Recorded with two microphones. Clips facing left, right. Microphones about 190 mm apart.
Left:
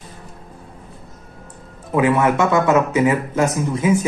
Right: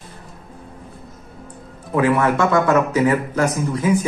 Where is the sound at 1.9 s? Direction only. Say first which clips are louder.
Left 1 dB; 20° left (ahead or behind).